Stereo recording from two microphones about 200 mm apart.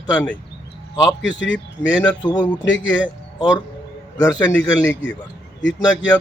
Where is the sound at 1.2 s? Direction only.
65° left (ahead or behind).